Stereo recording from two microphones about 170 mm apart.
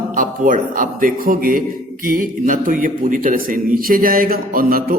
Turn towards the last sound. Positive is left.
turn(degrees=-60)  # may be behind; listen again after turning